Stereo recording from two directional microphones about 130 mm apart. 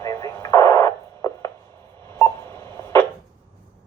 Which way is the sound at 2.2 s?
20° left (ahead or behind).